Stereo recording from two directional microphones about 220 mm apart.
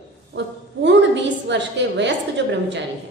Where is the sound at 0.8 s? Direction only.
55° right (ahead or behind).